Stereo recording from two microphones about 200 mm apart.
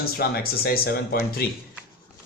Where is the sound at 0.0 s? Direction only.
50° left (ahead or behind).